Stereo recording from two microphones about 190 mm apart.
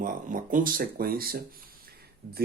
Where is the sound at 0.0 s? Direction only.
45° right (ahead or behind).